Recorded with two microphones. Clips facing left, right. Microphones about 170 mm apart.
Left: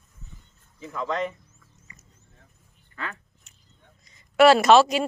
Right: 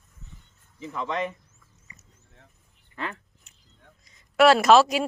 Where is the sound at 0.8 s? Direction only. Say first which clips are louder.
Left 1 dB; 20° right (ahead or behind).